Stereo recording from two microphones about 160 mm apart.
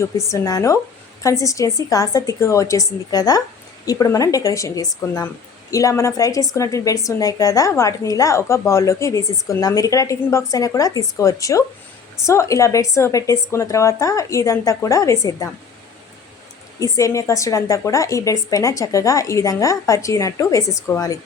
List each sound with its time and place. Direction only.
0.3 s a woman's voice: 20° left (ahead or behind)
16.8 s a woman's voice: 20° left (ahead or behind)